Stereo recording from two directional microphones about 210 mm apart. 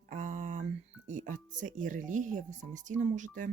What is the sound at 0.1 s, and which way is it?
Speech, 35° right (ahead or behind).